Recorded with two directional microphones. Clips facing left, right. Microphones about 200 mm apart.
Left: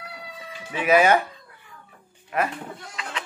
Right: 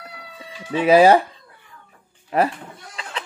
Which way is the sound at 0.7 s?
30° right (ahead or behind).